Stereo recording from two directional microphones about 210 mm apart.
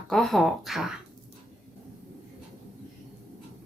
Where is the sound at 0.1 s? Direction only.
Centre (ahead or behind).